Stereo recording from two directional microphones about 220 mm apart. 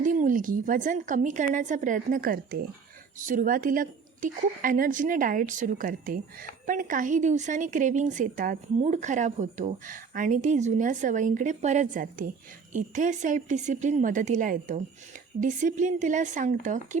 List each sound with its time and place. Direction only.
0.0 s a woman's voice: 35° right (ahead or behind)